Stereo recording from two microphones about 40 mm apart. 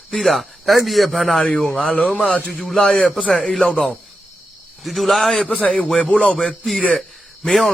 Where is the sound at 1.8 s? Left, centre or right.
Left.